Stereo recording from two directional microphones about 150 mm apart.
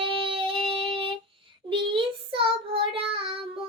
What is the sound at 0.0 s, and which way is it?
Child singing, 35° right (ahead or behind).